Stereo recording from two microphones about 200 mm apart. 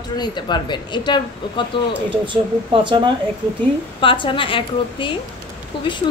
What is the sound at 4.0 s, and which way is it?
A woman's voice, 25° left (ahead or behind).